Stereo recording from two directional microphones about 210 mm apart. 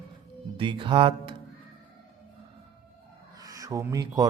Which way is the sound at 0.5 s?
25° right (ahead or behind).